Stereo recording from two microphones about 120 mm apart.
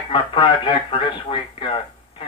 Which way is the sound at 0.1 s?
45° left (ahead or behind).